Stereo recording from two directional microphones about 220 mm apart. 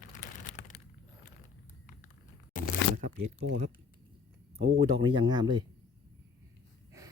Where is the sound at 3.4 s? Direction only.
55° right (ahead or behind).